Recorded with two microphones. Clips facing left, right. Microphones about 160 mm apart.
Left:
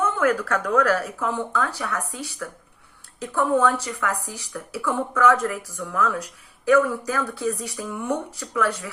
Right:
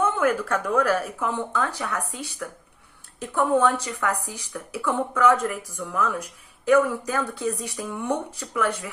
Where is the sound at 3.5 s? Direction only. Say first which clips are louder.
Even; 25° right (ahead or behind).